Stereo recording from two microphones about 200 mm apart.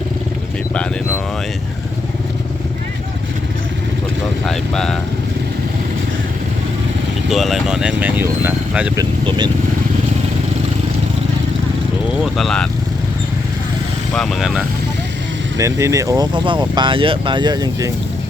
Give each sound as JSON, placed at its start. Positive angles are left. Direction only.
{"t": 4.4, "sound": "speech", "side_deg": 0}
{"t": 7.3, "sound": "speech", "side_deg": 0}
{"t": 9.0, "sound": "speech", "side_deg": -20}
{"t": 12.2, "sound": "speech", "side_deg": 0}
{"t": 14.1, "sound": "speech", "side_deg": 0}
{"t": 15.5, "sound": "speech", "side_deg": -15}